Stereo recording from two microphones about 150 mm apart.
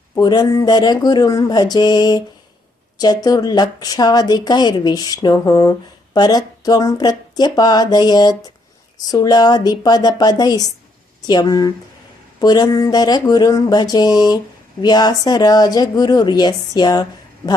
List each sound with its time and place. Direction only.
0.2 s a woman's voice: 30° left (ahead or behind)